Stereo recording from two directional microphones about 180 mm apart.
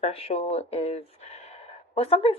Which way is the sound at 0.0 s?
35° left (ahead or behind).